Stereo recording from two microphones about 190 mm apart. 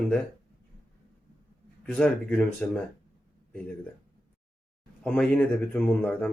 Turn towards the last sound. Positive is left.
turn(degrees=10)  # may be behind; listen again after turning